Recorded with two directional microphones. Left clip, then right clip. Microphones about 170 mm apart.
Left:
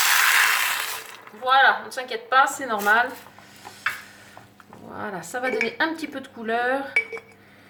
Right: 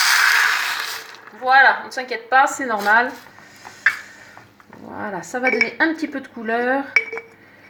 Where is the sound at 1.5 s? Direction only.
25° right (ahead or behind).